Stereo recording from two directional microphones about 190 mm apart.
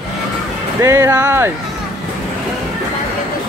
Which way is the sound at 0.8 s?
15° right (ahead or behind).